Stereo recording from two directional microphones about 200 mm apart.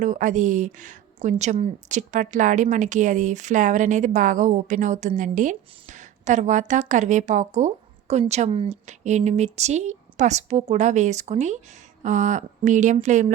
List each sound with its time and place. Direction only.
0.0 s a woman's voice: 40° right (ahead or behind)